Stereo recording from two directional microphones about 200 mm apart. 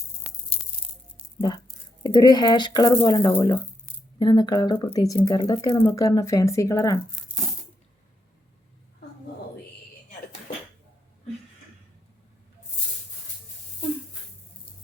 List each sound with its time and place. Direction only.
1.4 s speech: 20° left (ahead or behind)